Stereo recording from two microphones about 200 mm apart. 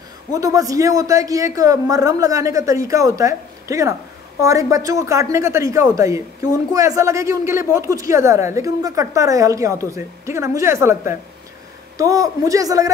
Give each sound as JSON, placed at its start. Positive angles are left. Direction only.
{"t": 0.3, "sound": "speech", "side_deg": -15}